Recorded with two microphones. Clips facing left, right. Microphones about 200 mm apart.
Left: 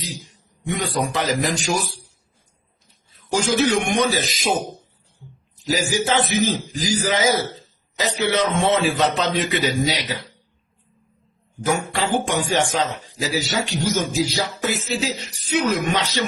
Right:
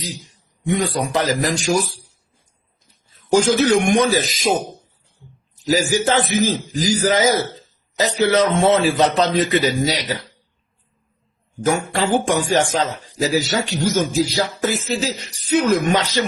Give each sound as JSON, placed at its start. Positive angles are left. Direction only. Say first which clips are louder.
{"t": 0.6, "sound": "a man's voice", "louder": "right 3 dB", "side_deg": -40}
{"t": 3.2, "sound": "a sound", "louder": "right 7 dB", "side_deg": -45}
{"t": 3.6, "sound": "speech", "louder": "right 4 dB", "side_deg": -45}
{"t": 5.6, "sound": "a man's voice", "louder": "right 4 dB", "side_deg": -45}
{"t": 11.6, "sound": "speech", "louder": "right 3 dB", "side_deg": -45}